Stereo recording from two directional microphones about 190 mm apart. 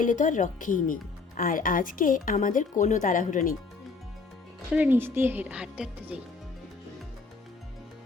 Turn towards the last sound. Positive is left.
turn(degrees=-5)  # may be behind; listen again after turning